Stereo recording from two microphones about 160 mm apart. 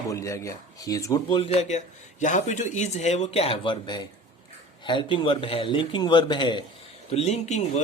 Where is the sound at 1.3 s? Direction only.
40° left (ahead or behind).